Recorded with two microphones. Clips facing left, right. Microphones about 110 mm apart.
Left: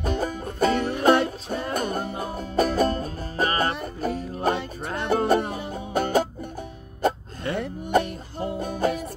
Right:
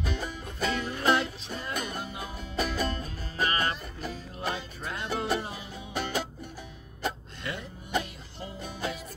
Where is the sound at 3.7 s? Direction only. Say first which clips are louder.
Left 7 dB; 55° left (ahead or behind).